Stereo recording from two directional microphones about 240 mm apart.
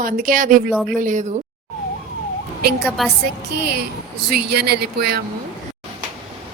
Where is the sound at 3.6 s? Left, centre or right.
Right.